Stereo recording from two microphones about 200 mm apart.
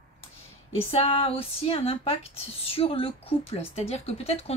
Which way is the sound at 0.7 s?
30° left (ahead or behind).